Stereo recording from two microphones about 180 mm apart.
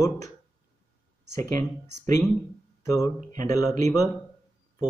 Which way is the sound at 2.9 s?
15° left (ahead or behind).